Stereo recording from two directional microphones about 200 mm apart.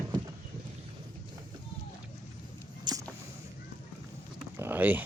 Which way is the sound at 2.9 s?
20° right (ahead or behind).